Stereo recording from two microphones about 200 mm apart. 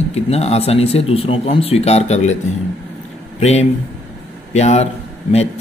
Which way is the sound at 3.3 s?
35° left (ahead or behind).